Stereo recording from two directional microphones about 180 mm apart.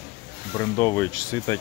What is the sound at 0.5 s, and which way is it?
Speech, 15° left (ahead or behind).